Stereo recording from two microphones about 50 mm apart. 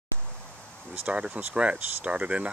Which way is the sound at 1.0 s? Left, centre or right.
Right.